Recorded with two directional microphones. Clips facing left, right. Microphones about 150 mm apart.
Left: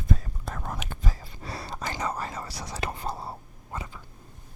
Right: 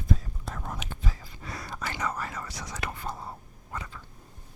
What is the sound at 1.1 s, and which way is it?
Whispering, 30° left (ahead or behind).